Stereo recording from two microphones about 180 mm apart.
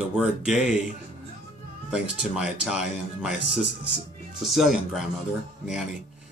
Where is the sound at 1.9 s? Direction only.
5° right (ahead or behind).